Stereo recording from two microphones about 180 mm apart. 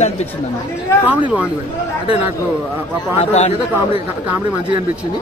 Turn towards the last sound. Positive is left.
turn(degrees=40)  # may be behind; listen again after turning